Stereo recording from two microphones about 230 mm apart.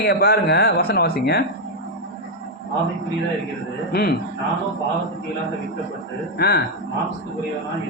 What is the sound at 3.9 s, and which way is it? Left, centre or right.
Speech, left.